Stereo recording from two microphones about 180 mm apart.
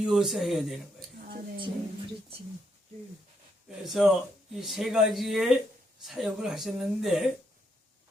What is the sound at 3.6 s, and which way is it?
Speech, centre (ahead or behind).